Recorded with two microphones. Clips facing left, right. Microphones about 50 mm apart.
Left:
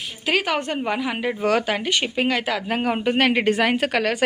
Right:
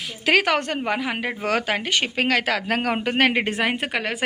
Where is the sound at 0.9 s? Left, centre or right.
Right.